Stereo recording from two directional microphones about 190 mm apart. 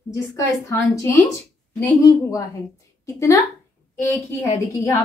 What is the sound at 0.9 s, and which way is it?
A woman's voice, 15° left (ahead or behind).